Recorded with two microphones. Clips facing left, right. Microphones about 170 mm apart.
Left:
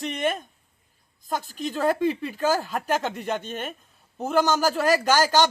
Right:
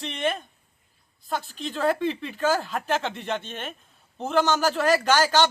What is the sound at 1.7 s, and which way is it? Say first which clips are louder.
A man's voice: left 1 dB; 10° left (ahead or behind).